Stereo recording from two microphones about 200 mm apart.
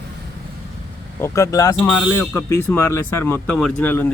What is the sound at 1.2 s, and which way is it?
Speech, 15° left (ahead or behind).